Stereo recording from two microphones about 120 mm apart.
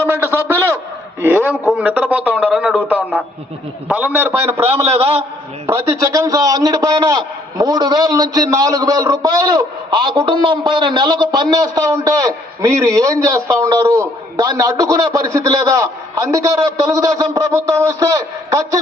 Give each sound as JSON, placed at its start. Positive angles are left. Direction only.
{"t": 0.0, "sound": "a sound", "side_deg": -20}
{"t": 3.9, "sound": "a man's voice", "side_deg": -10}
{"t": 4.6, "sound": "a man's voice", "side_deg": -50}
{"t": 5.6, "sound": "a man's voice", "side_deg": -25}